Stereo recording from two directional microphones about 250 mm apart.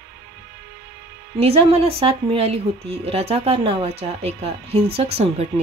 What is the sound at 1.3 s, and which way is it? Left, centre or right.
Speech, right.